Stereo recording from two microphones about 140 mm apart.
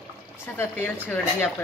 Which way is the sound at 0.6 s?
15° left (ahead or behind).